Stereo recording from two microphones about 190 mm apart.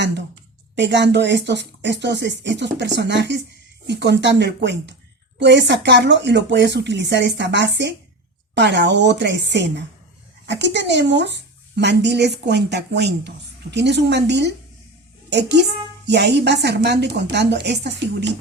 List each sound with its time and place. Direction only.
0.8 s speech: 65° right (ahead or behind)